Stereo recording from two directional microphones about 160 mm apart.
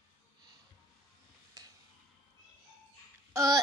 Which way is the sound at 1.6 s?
20° right (ahead or behind).